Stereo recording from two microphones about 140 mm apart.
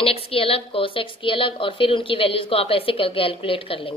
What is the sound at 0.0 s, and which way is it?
A woman's voice, 45° left (ahead or behind).